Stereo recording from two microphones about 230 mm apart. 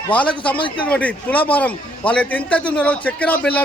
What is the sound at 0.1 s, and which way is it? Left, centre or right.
A man's voice, centre.